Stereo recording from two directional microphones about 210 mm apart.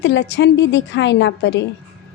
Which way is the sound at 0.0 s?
60° left (ahead or behind).